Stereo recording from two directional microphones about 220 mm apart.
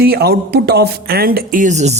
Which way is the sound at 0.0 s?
45° right (ahead or behind).